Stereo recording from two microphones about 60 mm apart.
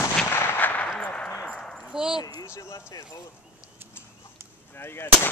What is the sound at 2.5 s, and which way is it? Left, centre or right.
Speech, left.